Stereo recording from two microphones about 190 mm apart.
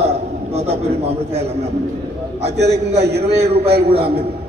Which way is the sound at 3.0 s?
60° right (ahead or behind).